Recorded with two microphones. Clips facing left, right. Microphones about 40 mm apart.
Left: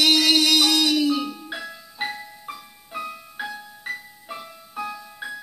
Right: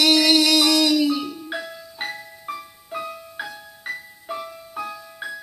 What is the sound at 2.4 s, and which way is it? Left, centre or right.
Music, centre.